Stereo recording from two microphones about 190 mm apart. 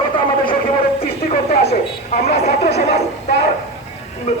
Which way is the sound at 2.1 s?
35° left (ahead or behind).